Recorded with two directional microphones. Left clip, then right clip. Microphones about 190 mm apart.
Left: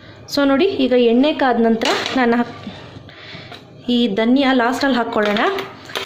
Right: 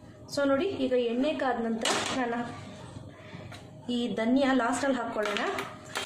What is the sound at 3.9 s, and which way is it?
A woman's voice, 35° left (ahead or behind).